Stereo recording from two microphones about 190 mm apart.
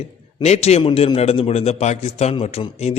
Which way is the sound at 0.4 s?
35° left (ahead or behind).